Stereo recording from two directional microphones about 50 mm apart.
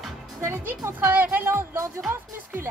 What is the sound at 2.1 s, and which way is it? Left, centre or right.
Music, right.